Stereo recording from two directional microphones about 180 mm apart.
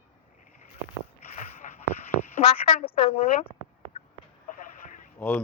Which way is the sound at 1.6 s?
45° left (ahead or behind).